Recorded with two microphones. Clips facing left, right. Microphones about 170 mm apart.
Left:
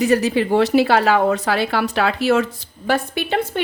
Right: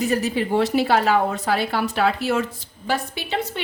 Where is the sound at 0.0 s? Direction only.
80° left.